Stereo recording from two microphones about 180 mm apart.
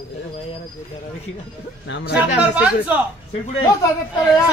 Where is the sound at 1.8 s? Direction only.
80° left.